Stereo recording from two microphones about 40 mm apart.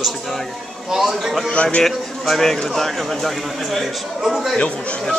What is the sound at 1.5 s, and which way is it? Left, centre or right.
Speech, left.